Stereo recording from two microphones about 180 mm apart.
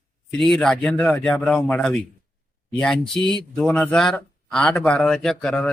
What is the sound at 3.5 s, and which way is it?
A man's voice, 5° left (ahead or behind).